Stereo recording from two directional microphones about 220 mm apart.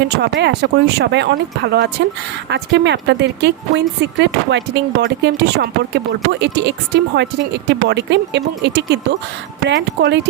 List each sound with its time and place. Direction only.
0.2 s a woman's voice: 50° right (ahead or behind)